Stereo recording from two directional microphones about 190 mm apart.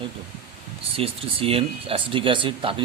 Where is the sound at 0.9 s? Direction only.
30° right (ahead or behind).